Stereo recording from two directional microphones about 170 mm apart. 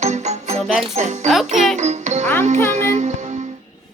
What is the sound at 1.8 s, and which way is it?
Music, 45° right (ahead or behind).